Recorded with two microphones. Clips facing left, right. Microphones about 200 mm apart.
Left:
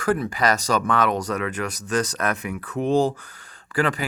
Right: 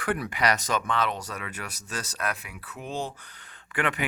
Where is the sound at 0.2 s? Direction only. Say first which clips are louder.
Left 4 dB; 35° left (ahead or behind).